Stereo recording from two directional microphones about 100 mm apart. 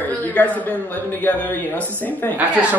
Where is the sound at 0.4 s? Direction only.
15° left (ahead or behind).